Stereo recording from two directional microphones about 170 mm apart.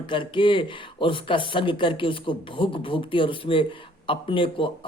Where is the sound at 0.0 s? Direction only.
30° left (ahead or behind).